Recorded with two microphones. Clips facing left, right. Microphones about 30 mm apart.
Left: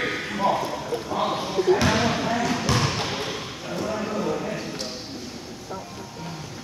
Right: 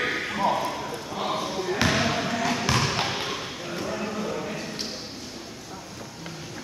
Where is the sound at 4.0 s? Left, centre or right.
Centre.